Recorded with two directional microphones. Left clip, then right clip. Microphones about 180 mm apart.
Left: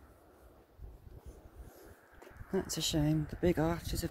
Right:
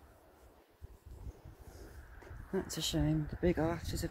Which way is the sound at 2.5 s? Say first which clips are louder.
Left 2 dB; 30° left (ahead or behind).